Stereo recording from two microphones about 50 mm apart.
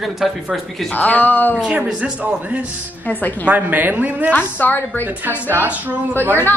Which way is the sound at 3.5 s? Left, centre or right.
Right.